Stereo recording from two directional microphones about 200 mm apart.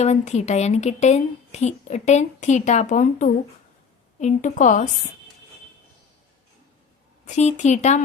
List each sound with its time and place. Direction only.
0.0 s a woman's voice: 35° left (ahead or behind)
7.3 s a woman's voice: 35° left (ahead or behind)